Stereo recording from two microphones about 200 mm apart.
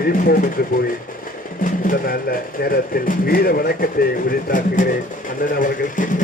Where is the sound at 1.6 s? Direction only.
40° left (ahead or behind).